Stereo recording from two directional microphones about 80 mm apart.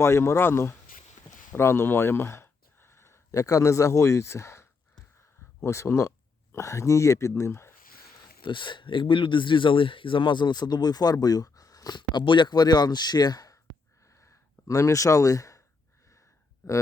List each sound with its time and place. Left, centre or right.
0.0 s speech: left
8.2 s speech: left
14.7 s speech: left
16.6 s speech: left